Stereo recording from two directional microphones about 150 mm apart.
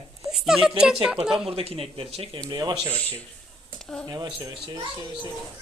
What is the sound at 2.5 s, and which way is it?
Speech, 30° right (ahead or behind).